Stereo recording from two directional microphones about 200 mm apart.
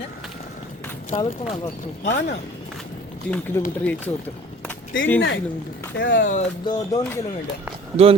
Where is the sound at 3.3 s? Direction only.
10° left (ahead or behind).